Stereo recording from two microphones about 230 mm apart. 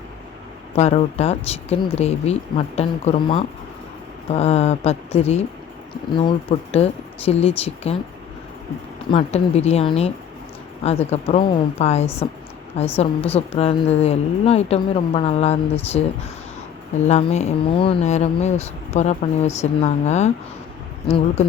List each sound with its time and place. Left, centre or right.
0.8 s speech: left
9.0 s speech: left